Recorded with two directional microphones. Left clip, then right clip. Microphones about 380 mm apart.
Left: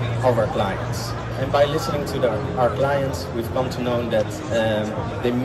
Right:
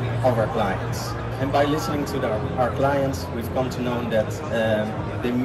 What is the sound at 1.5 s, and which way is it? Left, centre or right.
Speech, centre.